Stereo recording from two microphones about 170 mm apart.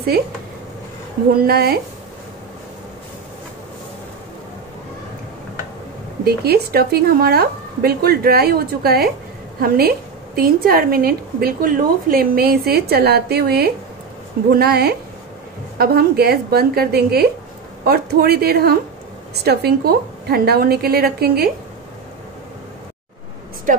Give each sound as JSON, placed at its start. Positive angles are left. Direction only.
{"t": 1.3, "sound": "a woman's voice", "side_deg": -65}
{"t": 6.2, "sound": "a woman's voice", "side_deg": -70}